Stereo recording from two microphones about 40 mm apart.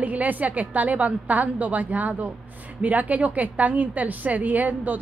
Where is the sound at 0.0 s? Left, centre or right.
Right.